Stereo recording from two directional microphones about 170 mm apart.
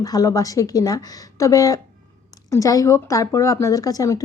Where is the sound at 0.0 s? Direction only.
20° left (ahead or behind).